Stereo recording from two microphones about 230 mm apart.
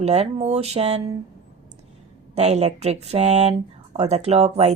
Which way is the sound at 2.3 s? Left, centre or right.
Right.